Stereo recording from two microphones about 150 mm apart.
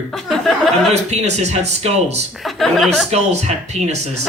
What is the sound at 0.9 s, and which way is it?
Speech, 45° right (ahead or behind).